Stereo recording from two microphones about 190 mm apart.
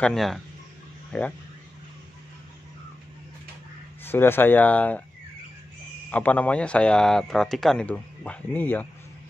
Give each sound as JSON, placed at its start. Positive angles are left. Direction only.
{"t": 0.0, "sound": "speech", "side_deg": 0}
{"t": 4.0, "sound": "speech", "side_deg": 10}
{"t": 6.1, "sound": "speech", "side_deg": 10}